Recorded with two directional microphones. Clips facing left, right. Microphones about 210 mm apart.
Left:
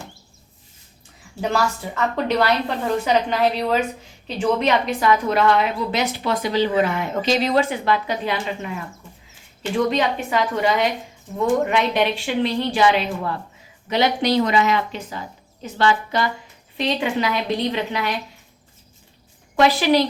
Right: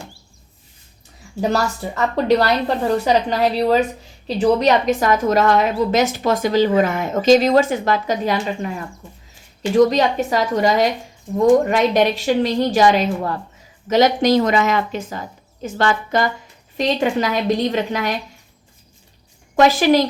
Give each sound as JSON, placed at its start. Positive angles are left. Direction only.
{"t": 1.4, "sound": "a woman's voice", "side_deg": -40}
{"t": 9.7, "sound": "a woman's voice", "side_deg": -40}
{"t": 19.5, "sound": "a woman's voice", "side_deg": -45}